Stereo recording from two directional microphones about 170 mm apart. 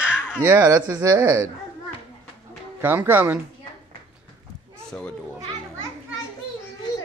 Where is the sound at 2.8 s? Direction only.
10° right (ahead or behind).